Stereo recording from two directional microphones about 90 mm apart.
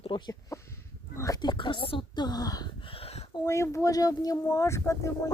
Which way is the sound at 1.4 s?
60° left (ahead or behind).